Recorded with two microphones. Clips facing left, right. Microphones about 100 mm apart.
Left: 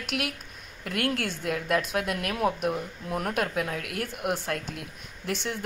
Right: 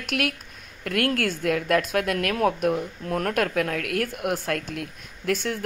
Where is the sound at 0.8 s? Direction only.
55° right (ahead or behind).